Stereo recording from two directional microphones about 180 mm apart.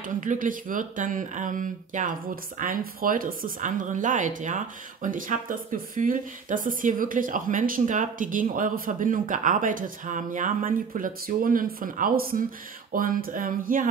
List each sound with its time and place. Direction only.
0.0 s speech: 45° right (ahead or behind)